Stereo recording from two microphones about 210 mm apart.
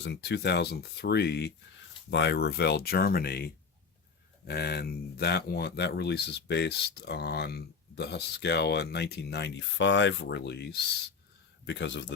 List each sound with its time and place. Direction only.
0.0 s speech: 55° left (ahead or behind)